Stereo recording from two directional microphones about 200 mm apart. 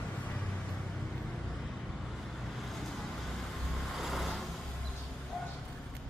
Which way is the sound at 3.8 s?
Centre (ahead or behind).